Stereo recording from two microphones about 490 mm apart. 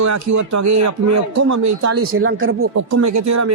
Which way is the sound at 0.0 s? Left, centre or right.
Right.